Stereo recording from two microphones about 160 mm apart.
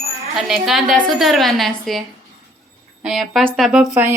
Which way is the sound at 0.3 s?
Centre (ahead or behind).